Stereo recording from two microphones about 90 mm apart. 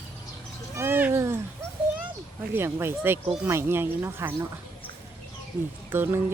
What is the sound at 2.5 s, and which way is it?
Speech, 30° right (ahead or behind).